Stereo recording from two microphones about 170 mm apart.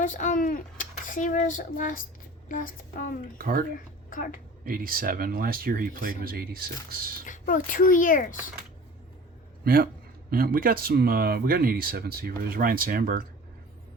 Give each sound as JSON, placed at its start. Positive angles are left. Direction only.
{"t": 0.0, "sound": "speech", "side_deg": 50}
{"t": 3.3, "sound": "speech", "side_deg": -55}
{"t": 4.1, "sound": "a woman's voice", "side_deg": 50}
{"t": 4.6, "sound": "speech", "side_deg": -55}
{"t": 7.3, "sound": "speech", "side_deg": 50}
{"t": 9.6, "sound": "speech", "side_deg": -60}